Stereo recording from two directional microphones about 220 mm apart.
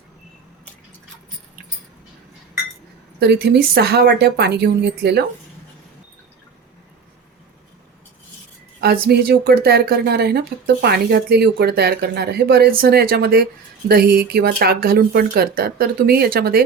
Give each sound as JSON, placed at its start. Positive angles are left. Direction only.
{"t": 3.2, "sound": "speech", "side_deg": -45}
{"t": 8.8, "sound": "speech", "side_deg": -45}